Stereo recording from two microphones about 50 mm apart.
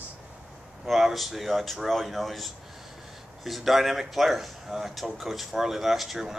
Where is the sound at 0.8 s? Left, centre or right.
Centre.